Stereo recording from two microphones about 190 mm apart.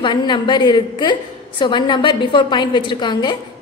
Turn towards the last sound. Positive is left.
turn(degrees=25)  # may be behind; listen again after turning